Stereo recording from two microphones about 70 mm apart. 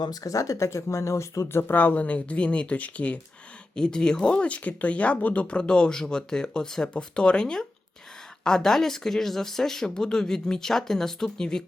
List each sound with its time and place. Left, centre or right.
0.0 s speech: left
1.6 s speech: left; by 11.6 s centre